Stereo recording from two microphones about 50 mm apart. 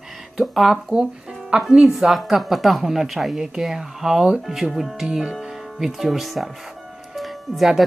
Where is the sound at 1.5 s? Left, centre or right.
Right.